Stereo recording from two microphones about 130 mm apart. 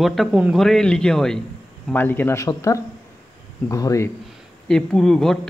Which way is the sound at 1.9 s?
15° left (ahead or behind).